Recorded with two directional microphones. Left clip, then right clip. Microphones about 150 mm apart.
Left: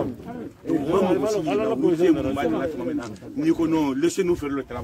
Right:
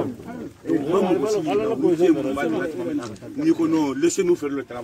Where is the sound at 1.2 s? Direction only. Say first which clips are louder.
Right 1 dB; 15° left (ahead or behind).